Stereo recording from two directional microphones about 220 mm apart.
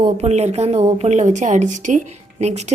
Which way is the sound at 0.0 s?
30° right (ahead or behind).